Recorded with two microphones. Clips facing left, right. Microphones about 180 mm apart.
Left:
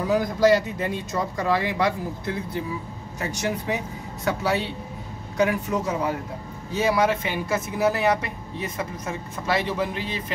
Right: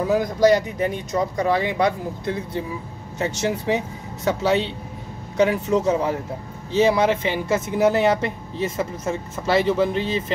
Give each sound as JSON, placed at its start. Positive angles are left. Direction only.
{"t": 0.1, "sound": "speech", "side_deg": -20}